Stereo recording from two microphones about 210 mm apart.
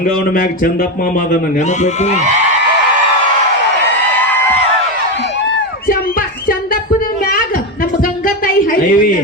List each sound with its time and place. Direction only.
1.8 s a man's voice: 35° left (ahead or behind)
8.7 s a woman's voice: 40° left (ahead or behind)